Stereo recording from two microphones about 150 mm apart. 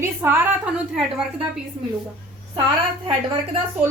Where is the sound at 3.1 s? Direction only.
35° right (ahead or behind).